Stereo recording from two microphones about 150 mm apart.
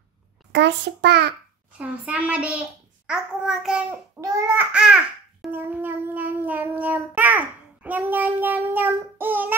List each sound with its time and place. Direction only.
1.0 s a child's voice: 90° right
1.7 s a child's voice: 10° right (ahead or behind)
4.2 s a child's voice: 20° right (ahead or behind)